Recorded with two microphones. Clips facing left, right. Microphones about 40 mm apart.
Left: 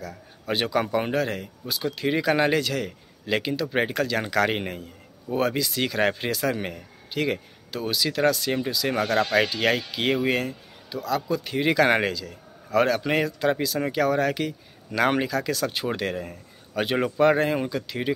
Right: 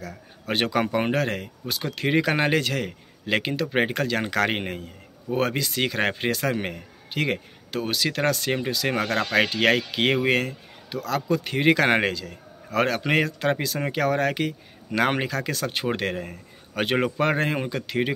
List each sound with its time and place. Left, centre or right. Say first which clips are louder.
0.0 s speech: left 1 dB; right
3.7 s speech: right 1 dB; right
4.6 s speech: even; right
5.3 s speech: even; right
9.5 s speech: right 3 dB; right